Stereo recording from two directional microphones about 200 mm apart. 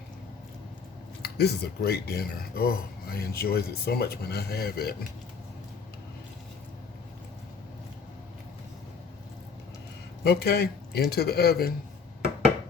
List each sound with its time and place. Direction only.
1.2 s speech: 55° left (ahead or behind)
10.2 s speech: 55° left (ahead or behind)